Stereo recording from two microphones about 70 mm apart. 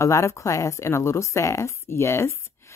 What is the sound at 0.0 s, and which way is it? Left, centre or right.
Speech, left.